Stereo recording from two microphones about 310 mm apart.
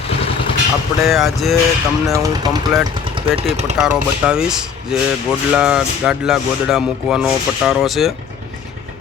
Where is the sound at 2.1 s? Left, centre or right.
Centre.